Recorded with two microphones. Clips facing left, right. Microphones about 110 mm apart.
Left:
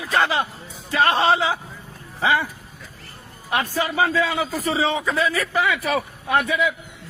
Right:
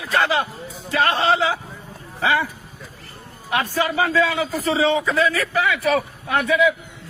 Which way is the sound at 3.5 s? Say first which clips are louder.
Right 2 dB; 30° left (ahead or behind).